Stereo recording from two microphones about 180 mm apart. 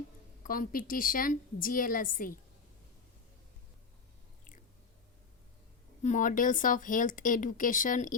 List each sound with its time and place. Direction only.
0.4 s speech: 50° left (ahead or behind)
6.0 s speech: 45° left (ahead or behind)